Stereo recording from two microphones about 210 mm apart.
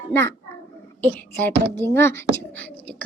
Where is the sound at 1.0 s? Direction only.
10° left (ahead or behind).